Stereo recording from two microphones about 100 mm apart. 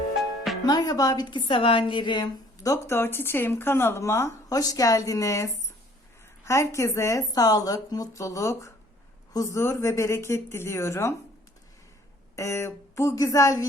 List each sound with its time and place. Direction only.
0.6 s a woman's voice: 40° left (ahead or behind)
1.5 s a woman's voice: 60° left (ahead or behind)
2.6 s a woman's voice: 25° left (ahead or behind)
12.4 s a woman's voice: 25° left (ahead or behind)